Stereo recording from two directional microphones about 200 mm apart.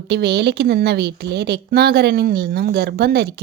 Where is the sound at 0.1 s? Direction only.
55° right (ahead or behind).